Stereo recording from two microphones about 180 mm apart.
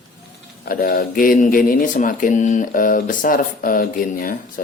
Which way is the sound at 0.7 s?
55° left (ahead or behind).